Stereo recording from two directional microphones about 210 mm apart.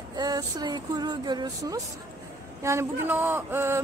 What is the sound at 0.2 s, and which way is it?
A woman's voice, 20° right (ahead or behind).